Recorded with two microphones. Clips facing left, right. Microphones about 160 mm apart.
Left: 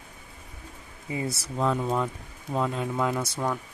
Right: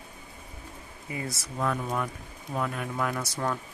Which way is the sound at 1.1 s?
25° left (ahead or behind).